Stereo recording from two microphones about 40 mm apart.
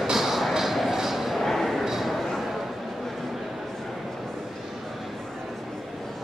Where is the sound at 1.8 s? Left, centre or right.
Centre.